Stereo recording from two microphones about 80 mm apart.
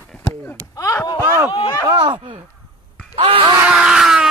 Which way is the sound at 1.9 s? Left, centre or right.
Right.